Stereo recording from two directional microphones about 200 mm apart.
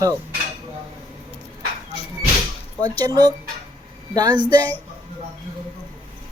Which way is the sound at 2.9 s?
20° right (ahead or behind).